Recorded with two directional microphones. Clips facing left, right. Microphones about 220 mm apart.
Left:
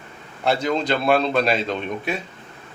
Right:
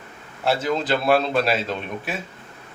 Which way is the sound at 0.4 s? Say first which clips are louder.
Left 1 dB; 5° right (ahead or behind).